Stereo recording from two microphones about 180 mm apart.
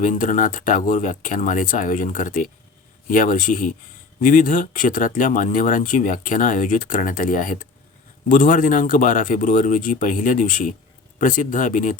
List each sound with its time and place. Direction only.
0.0 s speech: 45° left (ahead or behind)